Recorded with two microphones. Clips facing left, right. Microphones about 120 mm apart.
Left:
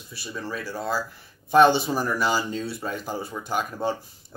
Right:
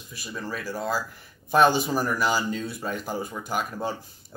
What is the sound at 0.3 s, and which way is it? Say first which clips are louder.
Speech: even; 5° right (ahead or behind).